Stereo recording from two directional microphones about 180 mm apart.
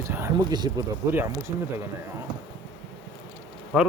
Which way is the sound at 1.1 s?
10° right (ahead or behind).